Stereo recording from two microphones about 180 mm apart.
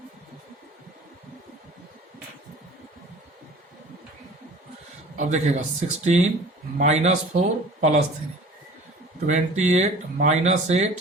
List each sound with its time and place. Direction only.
5.1 s speech: 40° right (ahead or behind)
9.2 s speech: 40° right (ahead or behind)